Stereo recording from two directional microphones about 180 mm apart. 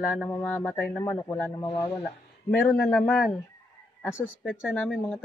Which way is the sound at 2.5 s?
5° left (ahead or behind).